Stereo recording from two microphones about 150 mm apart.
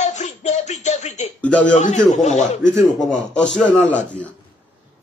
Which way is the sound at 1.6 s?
55° left (ahead or behind).